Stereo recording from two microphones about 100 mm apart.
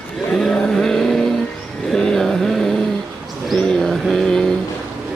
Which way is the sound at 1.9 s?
5° left (ahead or behind).